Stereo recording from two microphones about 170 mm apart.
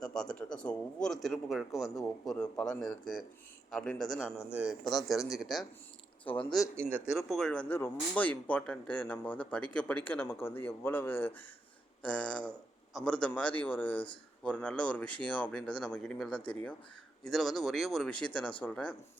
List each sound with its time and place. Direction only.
0.0 s speech: 5° left (ahead or behind)
6.2 s speech: 30° left (ahead or behind)
6.7 s speech: 10° right (ahead or behind)
7.1 s speech: centre (ahead or behind)